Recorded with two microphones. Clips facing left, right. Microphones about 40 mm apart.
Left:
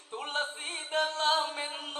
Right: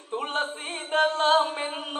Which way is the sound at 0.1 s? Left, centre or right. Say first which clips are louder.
Right 6 dB; right.